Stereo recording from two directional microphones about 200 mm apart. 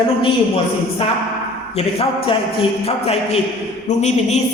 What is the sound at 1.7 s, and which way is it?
A man's voice, 30° left (ahead or behind).